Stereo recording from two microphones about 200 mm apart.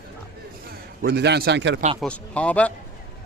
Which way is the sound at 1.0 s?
55° right (ahead or behind).